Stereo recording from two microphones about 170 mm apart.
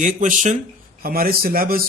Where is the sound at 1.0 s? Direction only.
60° right (ahead or behind).